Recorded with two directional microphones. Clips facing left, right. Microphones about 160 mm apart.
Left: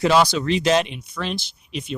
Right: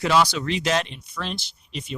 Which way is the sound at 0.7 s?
15° left (ahead or behind).